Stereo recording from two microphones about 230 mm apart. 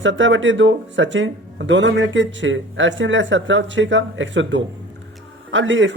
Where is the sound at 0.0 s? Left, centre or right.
Right.